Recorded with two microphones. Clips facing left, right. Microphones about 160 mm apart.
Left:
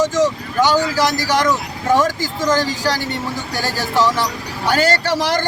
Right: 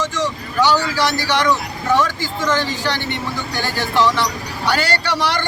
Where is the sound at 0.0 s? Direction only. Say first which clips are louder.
Left 6 dB; 45° left (ahead or behind).